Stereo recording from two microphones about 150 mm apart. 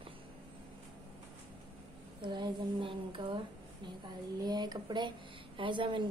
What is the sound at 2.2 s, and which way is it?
Speech, 30° right (ahead or behind).